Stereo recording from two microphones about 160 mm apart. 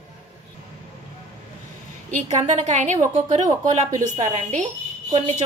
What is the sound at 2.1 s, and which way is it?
A woman's voice, 50° right (ahead or behind).